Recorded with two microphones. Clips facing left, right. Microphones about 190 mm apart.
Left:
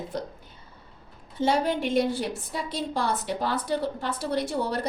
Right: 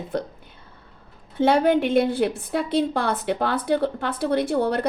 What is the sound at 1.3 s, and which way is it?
A woman's voice, 60° right (ahead or behind).